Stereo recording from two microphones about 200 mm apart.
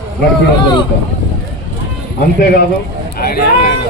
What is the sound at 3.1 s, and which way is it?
Speech, 50° left (ahead or behind).